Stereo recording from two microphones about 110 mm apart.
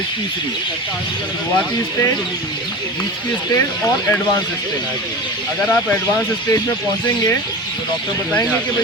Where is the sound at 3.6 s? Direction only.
20° left (ahead or behind).